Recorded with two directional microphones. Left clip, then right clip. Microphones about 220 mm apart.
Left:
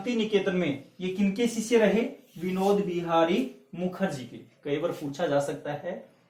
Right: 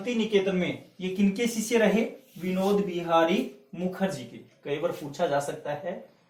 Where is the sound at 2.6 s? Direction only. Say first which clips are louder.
Left 1 dB; centre (ahead or behind).